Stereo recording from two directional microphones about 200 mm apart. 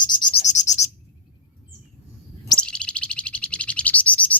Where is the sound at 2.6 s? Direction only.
5° left (ahead or behind).